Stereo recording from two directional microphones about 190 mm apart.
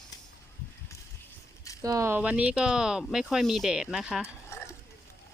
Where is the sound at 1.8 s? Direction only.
15° right (ahead or behind).